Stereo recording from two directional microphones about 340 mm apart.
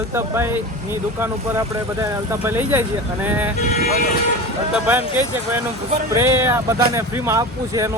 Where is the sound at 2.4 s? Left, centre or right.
Centre.